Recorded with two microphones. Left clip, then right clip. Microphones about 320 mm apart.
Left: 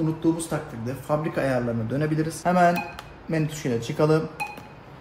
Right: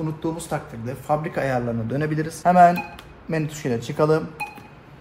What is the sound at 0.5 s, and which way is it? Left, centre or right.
A man's voice, centre.